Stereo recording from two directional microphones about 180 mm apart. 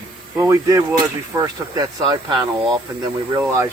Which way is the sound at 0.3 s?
15° right (ahead or behind).